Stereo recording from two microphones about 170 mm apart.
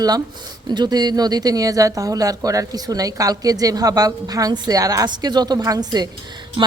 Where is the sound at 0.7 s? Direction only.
25° right (ahead or behind).